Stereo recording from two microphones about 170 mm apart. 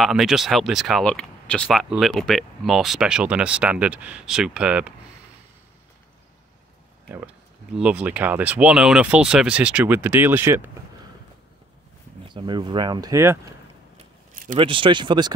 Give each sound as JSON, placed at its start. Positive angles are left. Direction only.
{"t": 0.0, "sound": "speech", "side_deg": 0}
{"t": 7.1, "sound": "speech", "side_deg": -10}
{"t": 12.3, "sound": "speech", "side_deg": -25}
{"t": 14.3, "sound": "a sound", "side_deg": -50}
{"t": 14.6, "sound": "speech", "side_deg": -30}